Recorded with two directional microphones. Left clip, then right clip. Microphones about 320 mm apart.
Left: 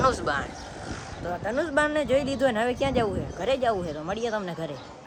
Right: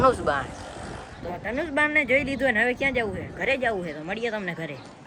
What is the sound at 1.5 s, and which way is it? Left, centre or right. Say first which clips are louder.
Speech: even; centre.